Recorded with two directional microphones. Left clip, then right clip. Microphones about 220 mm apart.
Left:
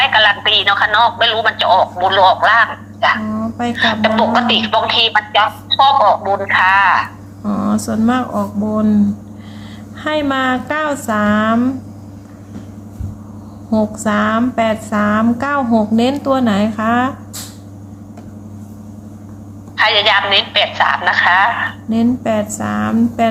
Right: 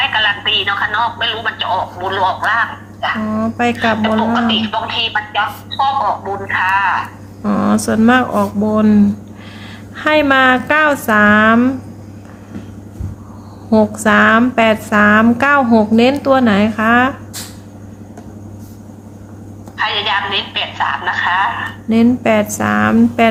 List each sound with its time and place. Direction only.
0.0 s a woman's voice: 35° left (ahead or behind)
3.3 s speech: 20° right (ahead or behind)
4.0 s a woman's voice: 35° left (ahead or behind)
7.4 s speech: 20° right (ahead or behind)
10.0 s a woman's voice: 15° right (ahead or behind)
13.7 s a woman's voice: 15° right (ahead or behind)
19.7 s a woman's voice: 35° left (ahead or behind)
21.8 s a woman's voice: 20° right (ahead or behind)